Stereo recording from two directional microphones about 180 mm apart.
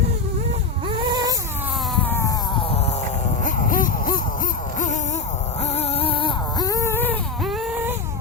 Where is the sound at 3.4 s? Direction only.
45° left (ahead or behind); by 7.1 s 15° left (ahead or behind).